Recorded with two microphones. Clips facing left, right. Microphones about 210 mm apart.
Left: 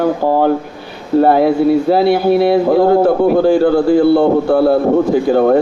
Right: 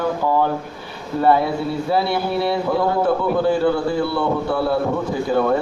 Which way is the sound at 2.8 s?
40° left (ahead or behind).